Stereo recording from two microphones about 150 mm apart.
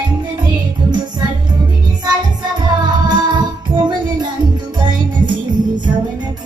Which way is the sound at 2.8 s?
30° right (ahead or behind).